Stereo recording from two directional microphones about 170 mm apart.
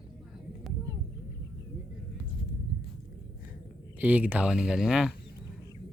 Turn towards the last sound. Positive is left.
turn(degrees=-5)  # may be behind; listen again after turning